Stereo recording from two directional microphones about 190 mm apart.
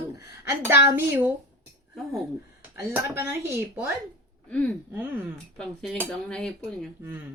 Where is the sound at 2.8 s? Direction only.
15° right (ahead or behind).